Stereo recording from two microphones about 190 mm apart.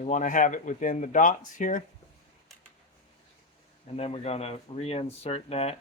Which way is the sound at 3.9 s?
35° left (ahead or behind).